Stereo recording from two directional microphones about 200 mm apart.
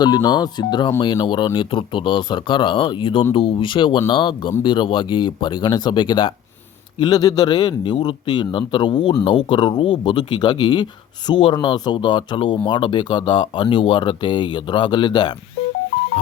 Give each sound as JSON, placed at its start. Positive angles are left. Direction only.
{"t": 0.0, "sound": "a man's voice", "side_deg": 20}